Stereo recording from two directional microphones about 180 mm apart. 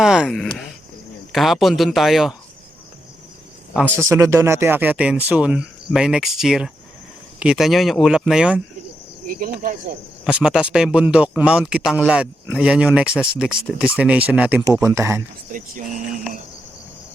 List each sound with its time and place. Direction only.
0.0 s speech: 5° right (ahead or behind)
3.9 s speech: 15° right (ahead or behind)
9.2 s speech: 50° right (ahead or behind)
10.2 s speech: 5° right (ahead or behind)